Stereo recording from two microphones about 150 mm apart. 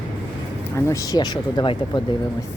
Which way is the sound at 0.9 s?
20° left (ahead or behind).